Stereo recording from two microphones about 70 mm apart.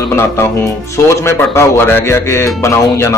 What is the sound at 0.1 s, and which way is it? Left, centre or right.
Speech, left.